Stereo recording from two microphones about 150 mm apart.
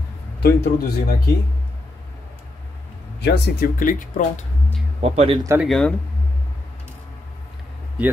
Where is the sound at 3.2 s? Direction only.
70° left (ahead or behind).